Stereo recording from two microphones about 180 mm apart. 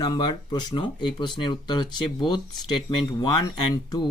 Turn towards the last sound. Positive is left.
turn(degrees=20)  # may be behind; listen again after turning